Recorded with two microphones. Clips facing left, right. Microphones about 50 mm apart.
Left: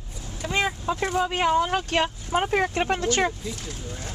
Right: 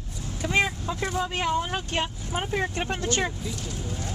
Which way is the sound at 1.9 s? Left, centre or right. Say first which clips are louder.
Left 5 dB; left.